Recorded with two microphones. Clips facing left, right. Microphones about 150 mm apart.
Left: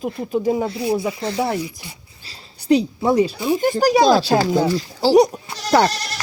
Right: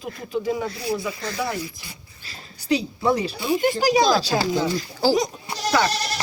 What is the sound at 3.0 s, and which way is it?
Speech, 25° left (ahead or behind).